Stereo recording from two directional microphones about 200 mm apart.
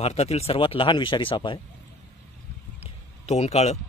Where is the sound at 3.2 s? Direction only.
30° left (ahead or behind).